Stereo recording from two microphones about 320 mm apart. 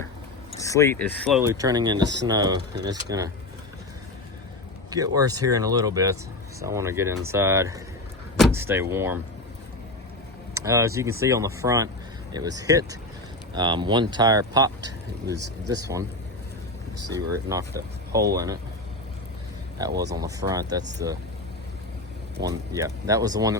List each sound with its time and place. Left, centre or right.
0.5 s speech: centre
1.4 s speech: centre
4.9 s speech: centre
10.5 s speech: centre
15.4 s speech: right
15.7 s speech: centre
17.1 s speech: centre
19.8 s speech: centre
22.4 s speech: centre